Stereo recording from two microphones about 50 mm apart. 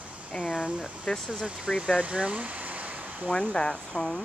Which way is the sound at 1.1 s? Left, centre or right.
Centre.